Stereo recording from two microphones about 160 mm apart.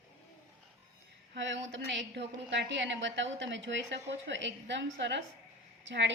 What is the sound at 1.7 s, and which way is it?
A woman's voice, 90° right.